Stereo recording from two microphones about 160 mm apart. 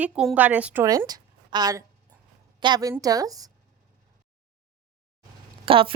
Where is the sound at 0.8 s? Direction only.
20° right (ahead or behind).